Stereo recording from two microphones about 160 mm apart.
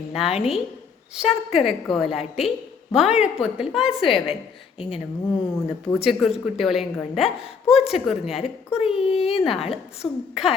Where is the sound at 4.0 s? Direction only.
35° left (ahead or behind).